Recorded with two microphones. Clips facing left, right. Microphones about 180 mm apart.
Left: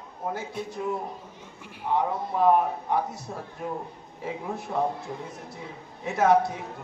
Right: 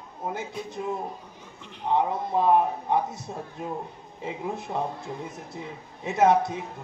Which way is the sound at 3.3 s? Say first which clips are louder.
Right 1 dB; 25° right (ahead or behind).